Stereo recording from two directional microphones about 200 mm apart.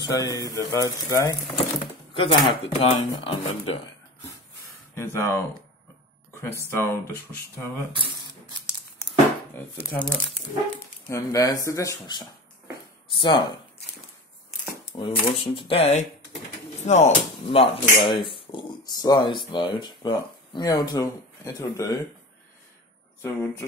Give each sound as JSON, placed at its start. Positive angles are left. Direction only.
{"t": 0.0, "sound": "speech", "side_deg": 15}
{"t": 4.9, "sound": "speech", "side_deg": 15}
{"t": 6.7, "sound": "speech", "side_deg": 10}
{"t": 7.9, "sound": "speech", "side_deg": -25}
{"t": 9.8, "sound": "speech", "side_deg": 5}
{"t": 14.9, "sound": "speech", "side_deg": 25}
{"t": 23.2, "sound": "speech", "side_deg": 15}